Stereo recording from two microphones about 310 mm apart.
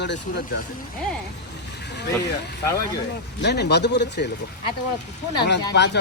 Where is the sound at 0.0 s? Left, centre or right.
Left.